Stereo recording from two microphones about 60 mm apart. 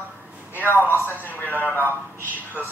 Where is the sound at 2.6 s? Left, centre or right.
Right.